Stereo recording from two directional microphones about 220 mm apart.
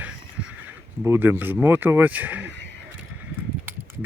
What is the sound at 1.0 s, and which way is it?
Speech, 10° right (ahead or behind).